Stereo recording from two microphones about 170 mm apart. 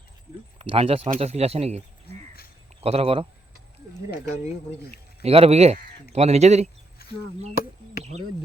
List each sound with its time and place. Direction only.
0.6 s speech: 35° right (ahead or behind)
2.8 s speech: 35° right (ahead or behind)
5.2 s speech: 35° right (ahead or behind)
7.0 s a sound: 65° left (ahead or behind)